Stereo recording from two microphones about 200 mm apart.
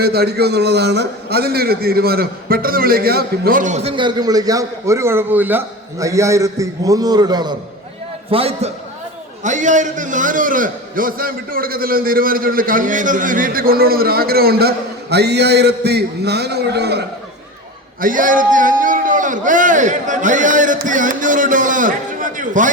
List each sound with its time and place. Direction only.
0.0 s a man's voice: 50° right (ahead or behind)
18.0 s a man's voice: 40° right (ahead or behind)